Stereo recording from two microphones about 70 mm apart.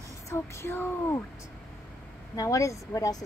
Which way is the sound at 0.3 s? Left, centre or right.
Left.